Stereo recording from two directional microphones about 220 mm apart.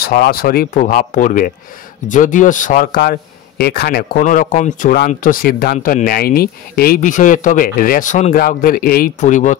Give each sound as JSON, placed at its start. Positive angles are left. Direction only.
{"t": 0.0, "sound": "speech", "side_deg": 45}